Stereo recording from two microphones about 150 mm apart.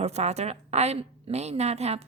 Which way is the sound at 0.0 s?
45° right (ahead or behind).